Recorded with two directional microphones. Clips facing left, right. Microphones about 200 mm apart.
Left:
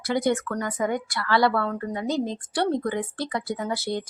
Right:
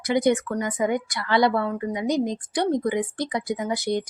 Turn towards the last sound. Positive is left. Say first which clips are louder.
# right 3 dB
turn(degrees=-15)  # may be behind; listen again after turning